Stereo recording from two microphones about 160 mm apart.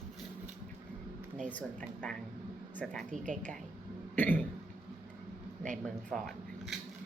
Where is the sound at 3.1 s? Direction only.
50° right (ahead or behind).